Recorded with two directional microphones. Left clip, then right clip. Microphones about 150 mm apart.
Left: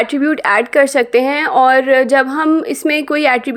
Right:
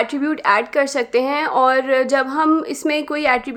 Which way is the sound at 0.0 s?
25° left (ahead or behind).